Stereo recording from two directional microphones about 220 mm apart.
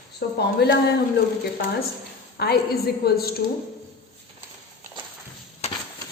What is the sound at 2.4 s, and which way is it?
Speech, 45° left (ahead or behind).